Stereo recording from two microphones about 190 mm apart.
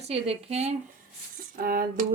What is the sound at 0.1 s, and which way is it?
Speech, 35° right (ahead or behind).